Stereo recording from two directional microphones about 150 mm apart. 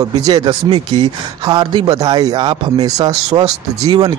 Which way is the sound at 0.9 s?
30° right (ahead or behind).